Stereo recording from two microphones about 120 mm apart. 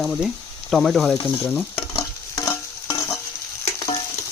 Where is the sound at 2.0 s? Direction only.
25° left (ahead or behind).